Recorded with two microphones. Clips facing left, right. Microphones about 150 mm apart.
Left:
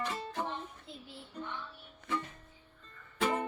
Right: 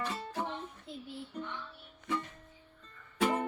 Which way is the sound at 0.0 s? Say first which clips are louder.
Even; 10° right (ahead or behind).